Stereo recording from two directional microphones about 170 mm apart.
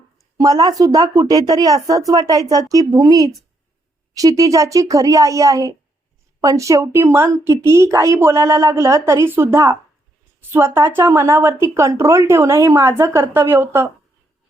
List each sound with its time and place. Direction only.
0.3 s speech: 20° right (ahead or behind)